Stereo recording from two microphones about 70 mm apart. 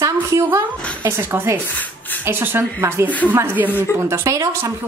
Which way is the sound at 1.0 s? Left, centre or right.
Right.